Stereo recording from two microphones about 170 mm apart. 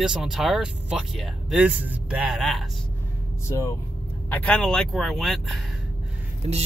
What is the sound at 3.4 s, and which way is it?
Speech, 15° left (ahead or behind).